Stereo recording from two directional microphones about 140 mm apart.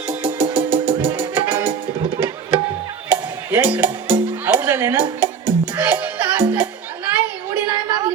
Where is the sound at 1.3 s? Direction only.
15° right (ahead or behind).